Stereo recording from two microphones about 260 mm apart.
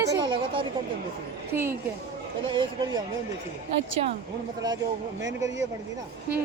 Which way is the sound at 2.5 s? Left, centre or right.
Centre.